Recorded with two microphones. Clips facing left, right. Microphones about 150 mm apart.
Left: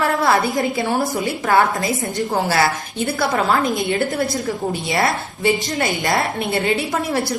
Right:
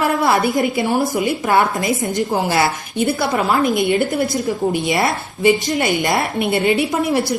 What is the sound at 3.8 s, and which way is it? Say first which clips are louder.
A woman's voice: right 3 dB; 20° right (ahead or behind).